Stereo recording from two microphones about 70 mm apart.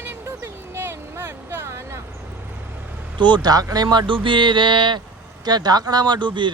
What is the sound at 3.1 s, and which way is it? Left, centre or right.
Speech, right.